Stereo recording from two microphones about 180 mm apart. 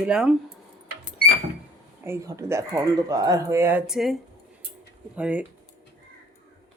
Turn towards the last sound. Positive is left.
turn(degrees=-5)  # may be behind; listen again after turning